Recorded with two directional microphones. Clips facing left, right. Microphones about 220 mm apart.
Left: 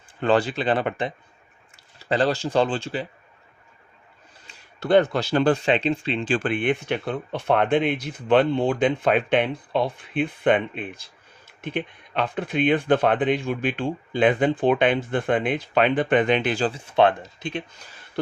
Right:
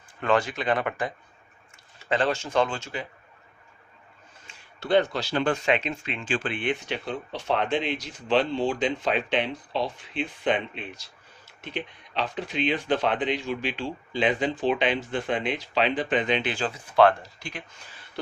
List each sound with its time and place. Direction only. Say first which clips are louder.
0.2 s speech: left 4 dB; 30° left (ahead or behind)
4.8 s speech: left 4 dB; 50° left (ahead or behind)
5.4 s speech: left 4 dB; 35° left (ahead or behind)
16.9 s speech: right 1 dB; 20° left (ahead or behind)